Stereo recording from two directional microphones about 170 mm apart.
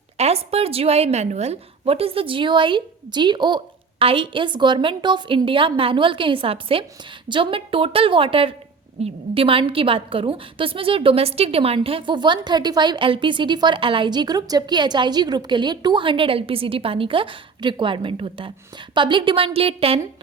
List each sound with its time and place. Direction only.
0.2 s a woman's voice: 35° right (ahead or behind)